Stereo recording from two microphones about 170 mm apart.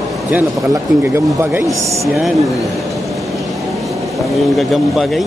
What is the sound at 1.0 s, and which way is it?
Speech, 15° right (ahead or behind).